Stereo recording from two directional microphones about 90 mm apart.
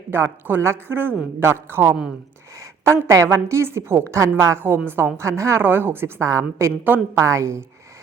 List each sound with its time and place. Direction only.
0.1 s a woman's voice: 25° right (ahead or behind)